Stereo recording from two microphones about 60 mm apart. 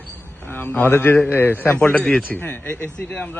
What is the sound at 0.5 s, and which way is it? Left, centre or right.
A man's voice, left.